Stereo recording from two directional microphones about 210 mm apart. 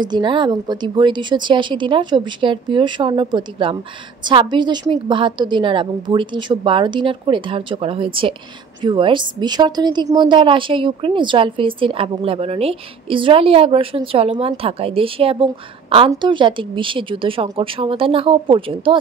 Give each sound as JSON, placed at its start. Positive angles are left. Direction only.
{"t": 0.0, "sound": "a woman's voice", "side_deg": -20}